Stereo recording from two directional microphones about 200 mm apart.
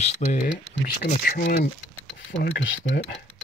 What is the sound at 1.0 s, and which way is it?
Speech, 50° left (ahead or behind).